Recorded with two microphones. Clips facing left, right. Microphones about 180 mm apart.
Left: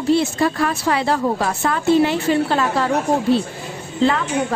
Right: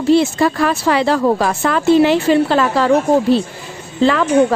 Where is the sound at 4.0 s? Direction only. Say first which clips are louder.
Right 6 dB; 90° right.